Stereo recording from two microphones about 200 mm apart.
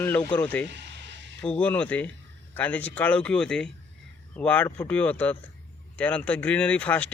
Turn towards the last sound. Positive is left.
turn(degrees=5)  # may be behind; listen again after turning